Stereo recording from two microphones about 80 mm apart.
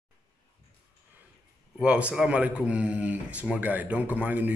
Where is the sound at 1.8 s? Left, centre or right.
Centre.